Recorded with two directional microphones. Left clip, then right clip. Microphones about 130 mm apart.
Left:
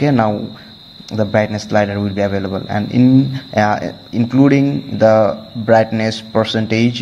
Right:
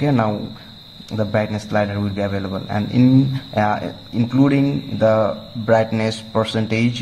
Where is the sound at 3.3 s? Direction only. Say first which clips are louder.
Left 4 dB; 25° left (ahead or behind).